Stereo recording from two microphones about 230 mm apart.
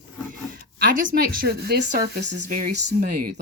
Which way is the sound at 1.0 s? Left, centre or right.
Right.